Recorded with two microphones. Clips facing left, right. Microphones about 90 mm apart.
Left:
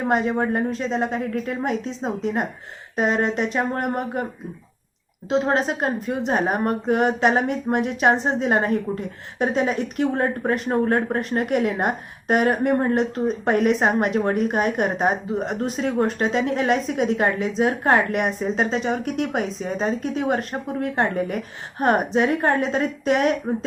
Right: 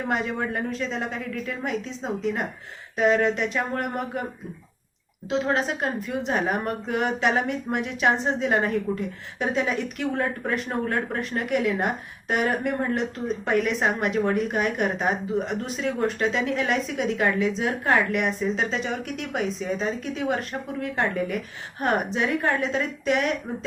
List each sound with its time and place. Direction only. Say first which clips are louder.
0.0 s speech: left 6 dB; 35° left (ahead or behind)
5.3 s speech: left 4 dB; 35° left (ahead or behind)